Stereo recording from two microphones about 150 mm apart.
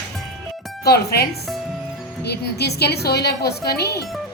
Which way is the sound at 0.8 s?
90° left.